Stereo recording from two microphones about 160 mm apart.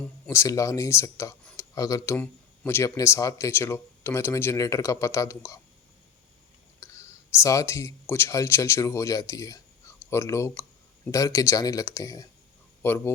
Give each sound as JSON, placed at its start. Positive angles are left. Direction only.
{"t": 0.3, "sound": "speech", "side_deg": 20}
{"t": 6.8, "sound": "clicking", "side_deg": 15}
{"t": 7.3, "sound": "speech", "side_deg": 20}